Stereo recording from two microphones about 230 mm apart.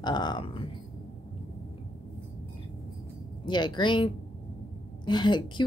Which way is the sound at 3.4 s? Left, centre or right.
Centre.